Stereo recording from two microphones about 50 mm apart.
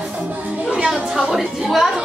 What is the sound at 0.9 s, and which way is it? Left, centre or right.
A woman's voice, centre.